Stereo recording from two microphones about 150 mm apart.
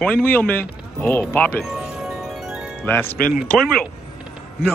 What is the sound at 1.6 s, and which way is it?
Chime, centre (ahead or behind).